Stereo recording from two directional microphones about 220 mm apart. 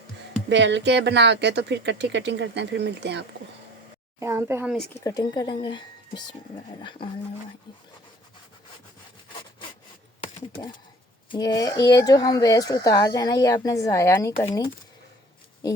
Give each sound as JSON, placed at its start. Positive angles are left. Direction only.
{"t": 0.5, "sound": "speech", "side_deg": -55}
{"t": 4.2, "sound": "speech", "side_deg": -10}
{"t": 4.9, "sound": "speech", "side_deg": 15}
{"t": 11.3, "sound": "speech", "side_deg": 20}